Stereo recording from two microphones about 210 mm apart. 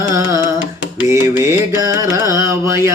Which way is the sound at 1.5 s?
15° right (ahead or behind).